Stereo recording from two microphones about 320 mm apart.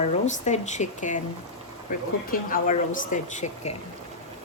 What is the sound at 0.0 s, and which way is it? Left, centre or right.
Speech, left.